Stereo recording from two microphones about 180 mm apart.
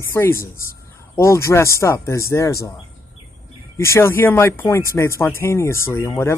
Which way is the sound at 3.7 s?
15° left (ahead or behind).